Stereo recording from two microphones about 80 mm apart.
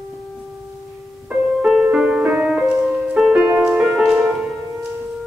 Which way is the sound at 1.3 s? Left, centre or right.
Centre.